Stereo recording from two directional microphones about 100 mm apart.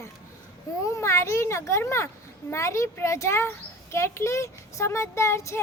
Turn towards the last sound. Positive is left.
turn(degrees=30)  # may be behind; listen again after turning